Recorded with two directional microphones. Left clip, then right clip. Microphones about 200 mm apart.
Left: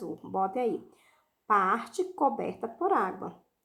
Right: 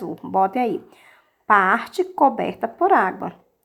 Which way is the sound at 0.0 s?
30° right (ahead or behind).